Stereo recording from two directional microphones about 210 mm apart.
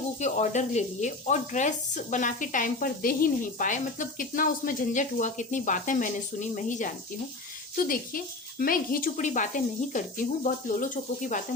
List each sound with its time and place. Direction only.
0.2 s speech: 35° left (ahead or behind)